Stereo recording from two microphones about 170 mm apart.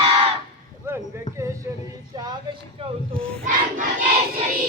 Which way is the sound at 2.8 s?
35° right (ahead or behind).